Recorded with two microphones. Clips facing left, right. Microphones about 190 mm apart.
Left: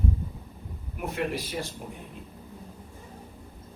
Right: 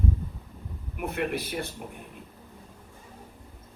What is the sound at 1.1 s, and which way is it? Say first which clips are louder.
Speech: even; 60° right (ahead or behind).